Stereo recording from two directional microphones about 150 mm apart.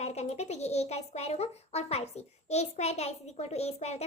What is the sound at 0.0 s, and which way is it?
A child's voice, 45° left (ahead or behind).